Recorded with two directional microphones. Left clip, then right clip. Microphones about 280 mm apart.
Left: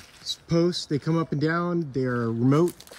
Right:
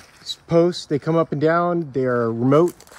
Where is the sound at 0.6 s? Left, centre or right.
Centre.